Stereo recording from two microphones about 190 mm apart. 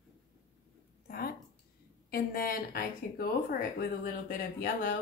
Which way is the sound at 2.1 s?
55° left (ahead or behind).